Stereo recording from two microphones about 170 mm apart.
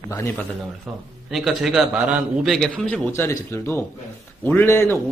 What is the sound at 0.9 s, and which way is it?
A man's voice, centre (ahead or behind).